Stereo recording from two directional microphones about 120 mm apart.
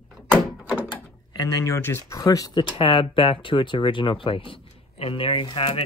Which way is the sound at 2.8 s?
50° left (ahead or behind).